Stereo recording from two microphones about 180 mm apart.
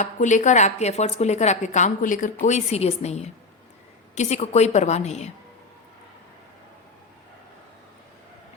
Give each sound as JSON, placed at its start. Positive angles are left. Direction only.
{"t": 0.0, "sound": "speech", "side_deg": 45}